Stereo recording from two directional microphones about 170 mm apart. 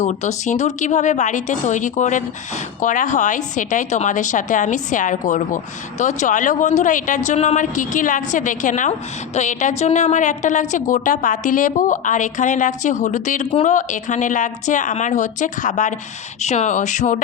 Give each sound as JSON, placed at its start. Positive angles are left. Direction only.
{"t": 0.0, "sound": "a woman's voice", "side_deg": 40}